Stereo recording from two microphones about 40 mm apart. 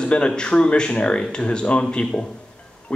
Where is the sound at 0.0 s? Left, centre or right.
Left.